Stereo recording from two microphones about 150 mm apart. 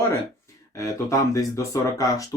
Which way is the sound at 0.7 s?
20° left (ahead or behind).